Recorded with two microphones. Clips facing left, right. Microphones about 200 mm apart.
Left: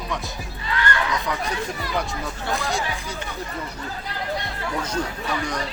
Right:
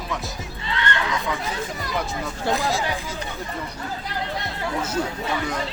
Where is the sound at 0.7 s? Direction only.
25° right (ahead or behind).